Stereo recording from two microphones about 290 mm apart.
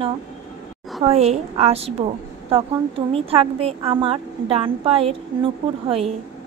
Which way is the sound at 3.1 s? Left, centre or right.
Centre.